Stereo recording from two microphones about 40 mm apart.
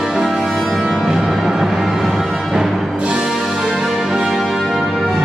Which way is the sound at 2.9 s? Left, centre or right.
Right.